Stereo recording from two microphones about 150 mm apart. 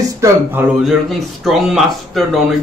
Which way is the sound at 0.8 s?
Centre (ahead or behind).